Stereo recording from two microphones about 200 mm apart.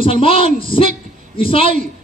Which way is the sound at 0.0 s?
25° left (ahead or behind).